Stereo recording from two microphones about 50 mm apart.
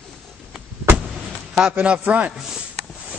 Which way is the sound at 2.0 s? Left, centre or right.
Right.